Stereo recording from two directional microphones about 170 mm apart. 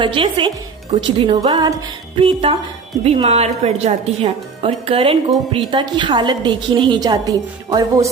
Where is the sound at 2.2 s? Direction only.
35° right (ahead or behind).